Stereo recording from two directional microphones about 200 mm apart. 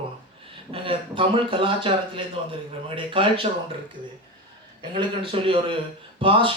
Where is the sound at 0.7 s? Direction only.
25° right (ahead or behind).